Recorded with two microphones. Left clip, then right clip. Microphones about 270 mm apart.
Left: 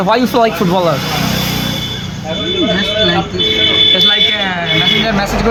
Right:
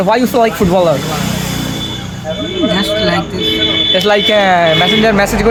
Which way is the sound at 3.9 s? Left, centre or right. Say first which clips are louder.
Even; centre.